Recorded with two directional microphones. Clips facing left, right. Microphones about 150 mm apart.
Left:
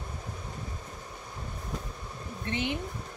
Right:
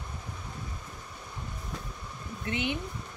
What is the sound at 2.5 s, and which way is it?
Speech, 35° left (ahead or behind).